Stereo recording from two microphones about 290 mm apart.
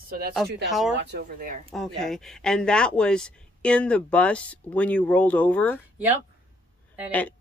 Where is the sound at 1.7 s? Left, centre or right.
Centre.